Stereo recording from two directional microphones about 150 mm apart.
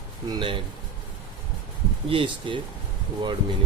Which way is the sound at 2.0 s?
35° right (ahead or behind).